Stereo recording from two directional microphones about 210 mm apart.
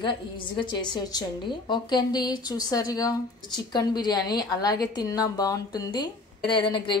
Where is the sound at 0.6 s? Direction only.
20° left (ahead or behind).